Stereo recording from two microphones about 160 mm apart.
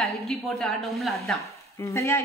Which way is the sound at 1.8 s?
20° left (ahead or behind).